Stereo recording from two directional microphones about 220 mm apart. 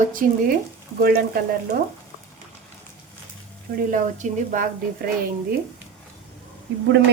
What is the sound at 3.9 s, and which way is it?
Speech, 35° right (ahead or behind).